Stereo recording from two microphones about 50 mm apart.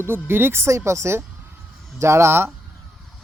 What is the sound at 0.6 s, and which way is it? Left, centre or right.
Speech, right.